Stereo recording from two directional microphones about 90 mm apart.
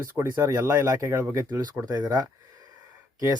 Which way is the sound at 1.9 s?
45° right (ahead or behind).